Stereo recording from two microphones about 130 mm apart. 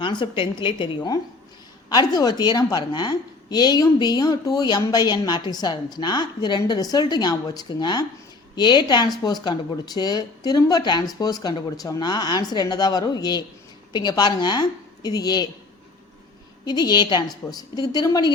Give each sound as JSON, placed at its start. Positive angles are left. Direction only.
{"t": 0.0, "sound": "a woman's voice", "side_deg": 35}
{"t": 16.6, "sound": "a woman's voice", "side_deg": 30}